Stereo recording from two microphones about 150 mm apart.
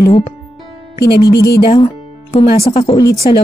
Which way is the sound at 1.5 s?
35° left (ahead or behind).